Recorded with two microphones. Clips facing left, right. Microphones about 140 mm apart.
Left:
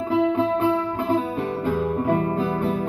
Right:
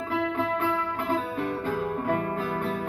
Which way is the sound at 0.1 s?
20° left (ahead or behind).